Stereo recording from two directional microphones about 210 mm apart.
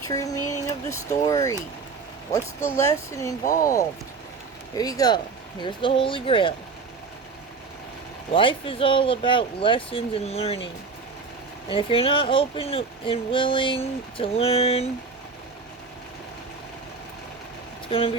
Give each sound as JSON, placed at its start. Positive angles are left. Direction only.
{"t": 0.0, "sound": "speech", "side_deg": 15}
{"t": 3.4, "sound": "speech", "side_deg": 40}
{"t": 4.7, "sound": "speech", "side_deg": 15}
{"t": 8.3, "sound": "speech", "side_deg": 25}
{"t": 11.7, "sound": "speech", "side_deg": 25}
{"t": 17.8, "sound": "speech", "side_deg": 25}